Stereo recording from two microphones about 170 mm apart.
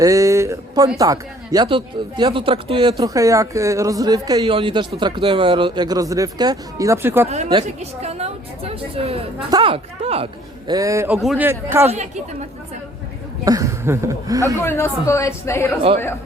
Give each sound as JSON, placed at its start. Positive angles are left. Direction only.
{"t": 0.0, "sound": "speech", "side_deg": -20}
{"t": 3.0, "sound": "speech", "side_deg": -20}
{"t": 7.3, "sound": "a woman's voice", "side_deg": -40}
{"t": 10.7, "sound": "a man's voice", "side_deg": -20}
{"t": 11.2, "sound": "a man's voice", "side_deg": 0}
{"t": 11.4, "sound": "a man's voice", "side_deg": -15}
{"t": 11.9, "sound": "a woman's voice", "side_deg": -45}
{"t": 13.4, "sound": "speech", "side_deg": -20}
{"t": 14.6, "sound": "a woman's voice", "side_deg": 15}